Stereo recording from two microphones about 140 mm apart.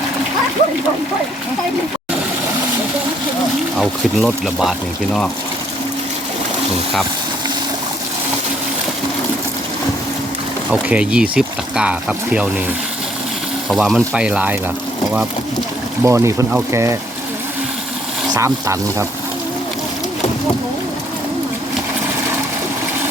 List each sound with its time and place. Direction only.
3.8 s speech: centre (ahead or behind)
10.7 s speech: 10° right (ahead or behind)
13.7 s speech: 5° right (ahead or behind)
16.0 s speech: 20° right (ahead or behind)
18.3 s speech: 20° right (ahead or behind)